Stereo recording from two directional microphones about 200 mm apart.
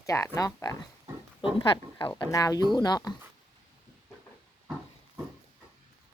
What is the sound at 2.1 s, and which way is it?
Speech, 15° left (ahead or behind).